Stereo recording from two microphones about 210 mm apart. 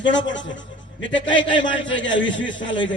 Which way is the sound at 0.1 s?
60° left (ahead or behind).